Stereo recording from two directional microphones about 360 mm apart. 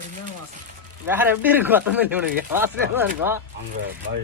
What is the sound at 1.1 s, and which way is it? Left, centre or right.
Speech, centre.